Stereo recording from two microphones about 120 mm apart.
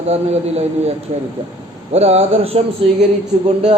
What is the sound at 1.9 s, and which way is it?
A man's voice, 60° right (ahead or behind).